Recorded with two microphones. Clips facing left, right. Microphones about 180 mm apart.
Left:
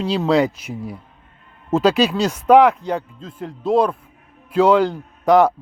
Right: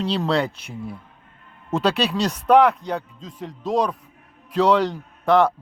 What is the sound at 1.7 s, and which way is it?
Speech, 5° left (ahead or behind).